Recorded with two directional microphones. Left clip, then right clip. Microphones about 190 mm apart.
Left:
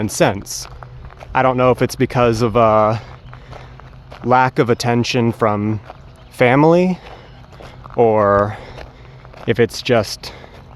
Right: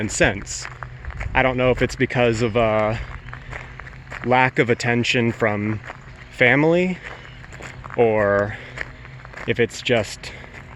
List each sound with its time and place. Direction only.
0.0 s speech: 25° left (ahead or behind)
4.3 s speech: 30° left (ahead or behind)